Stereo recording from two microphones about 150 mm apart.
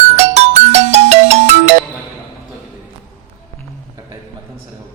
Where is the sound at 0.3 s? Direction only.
45° right (ahead or behind).